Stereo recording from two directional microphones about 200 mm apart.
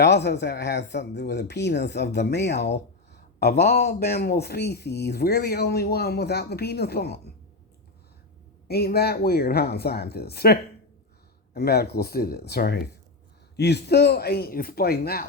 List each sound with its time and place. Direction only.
0.0 s speech: 60° left (ahead or behind)
8.6 s speech: 50° left (ahead or behind)